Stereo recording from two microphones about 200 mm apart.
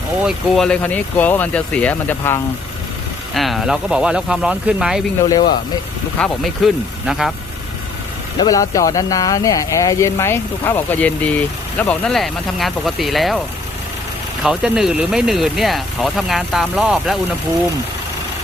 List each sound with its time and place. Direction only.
0.3 s speech: centre (ahead or behind)
3.3 s speech: centre (ahead or behind)
5.2 s speech: 20° left (ahead or behind)
6.1 s speech: centre (ahead or behind)
8.4 s speech: 15° left (ahead or behind); by 13.4 s centre (ahead or behind)
14.4 s speech: centre (ahead or behind)